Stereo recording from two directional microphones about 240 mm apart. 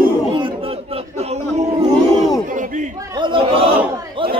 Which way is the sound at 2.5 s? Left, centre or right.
Right.